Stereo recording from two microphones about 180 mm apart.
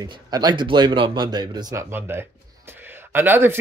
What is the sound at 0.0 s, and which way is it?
Speech, 20° right (ahead or behind).